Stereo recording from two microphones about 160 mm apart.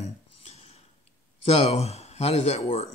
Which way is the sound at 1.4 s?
40° left (ahead or behind).